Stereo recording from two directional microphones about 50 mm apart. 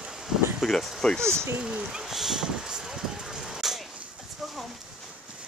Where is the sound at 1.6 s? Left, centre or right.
Centre.